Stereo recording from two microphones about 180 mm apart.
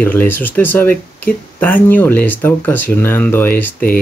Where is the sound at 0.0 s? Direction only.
10° left (ahead or behind).